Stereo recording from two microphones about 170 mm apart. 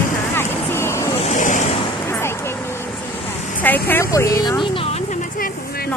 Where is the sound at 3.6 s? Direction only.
10° left (ahead or behind).